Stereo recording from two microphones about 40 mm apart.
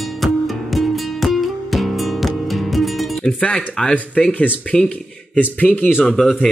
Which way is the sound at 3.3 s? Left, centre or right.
Left.